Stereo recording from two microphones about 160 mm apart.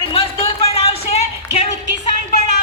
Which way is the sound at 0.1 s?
35° left (ahead or behind).